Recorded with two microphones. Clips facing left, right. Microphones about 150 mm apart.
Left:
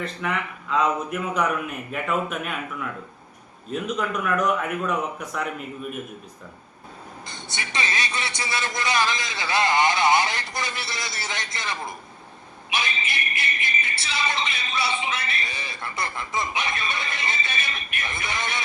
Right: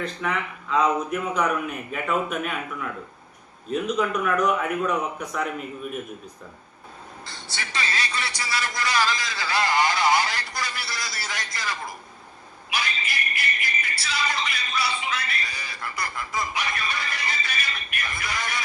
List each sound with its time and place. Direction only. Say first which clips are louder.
0.0 s speech: even; centre (ahead or behind)
3.7 s speech: right 3 dB; centre (ahead or behind)
7.3 s speech: left 1 dB; 20° left (ahead or behind)